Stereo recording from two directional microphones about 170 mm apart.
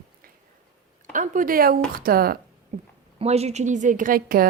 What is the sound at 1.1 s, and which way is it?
A woman's voice, 50° right (ahead or behind).